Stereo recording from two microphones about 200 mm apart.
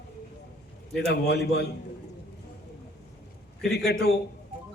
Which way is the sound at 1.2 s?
55° left (ahead or behind).